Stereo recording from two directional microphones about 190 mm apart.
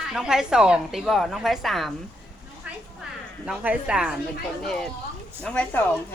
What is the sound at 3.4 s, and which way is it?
A woman's voice, 5° right (ahead or behind).